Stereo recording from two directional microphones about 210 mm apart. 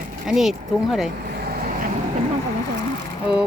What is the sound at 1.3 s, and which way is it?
Vehicle, 50° right (ahead or behind).